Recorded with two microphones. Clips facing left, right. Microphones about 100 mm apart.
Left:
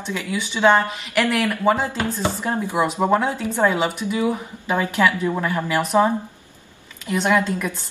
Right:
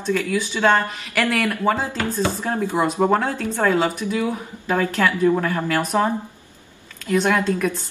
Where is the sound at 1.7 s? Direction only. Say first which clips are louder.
Even; 20° left (ahead or behind).